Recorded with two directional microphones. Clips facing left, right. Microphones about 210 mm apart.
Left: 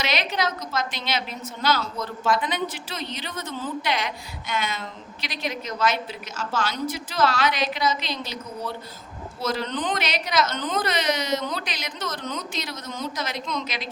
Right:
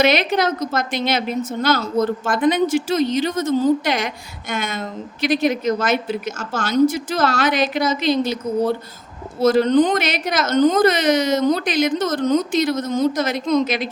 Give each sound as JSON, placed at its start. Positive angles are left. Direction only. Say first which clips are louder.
{"t": 0.0, "sound": "a woman's voice", "louder": "right 9 dB", "side_deg": -55}